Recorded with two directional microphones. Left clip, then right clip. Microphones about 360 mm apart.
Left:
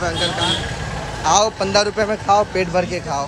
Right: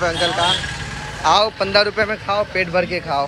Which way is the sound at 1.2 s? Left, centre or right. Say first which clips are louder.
Right 1 dB; centre.